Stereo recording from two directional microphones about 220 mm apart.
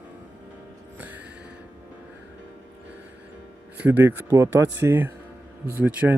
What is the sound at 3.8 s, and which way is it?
Speech, 10° right (ahead or behind).